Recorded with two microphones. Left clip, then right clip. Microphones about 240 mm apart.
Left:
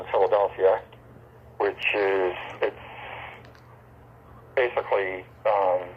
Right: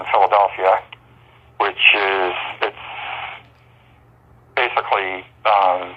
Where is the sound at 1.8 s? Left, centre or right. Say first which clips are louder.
Right 10 dB; right.